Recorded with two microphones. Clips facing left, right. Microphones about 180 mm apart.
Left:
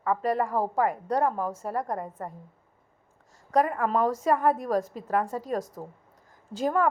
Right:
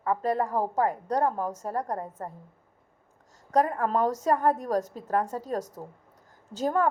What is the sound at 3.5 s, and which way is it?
A woman's voice, 10° left (ahead or behind).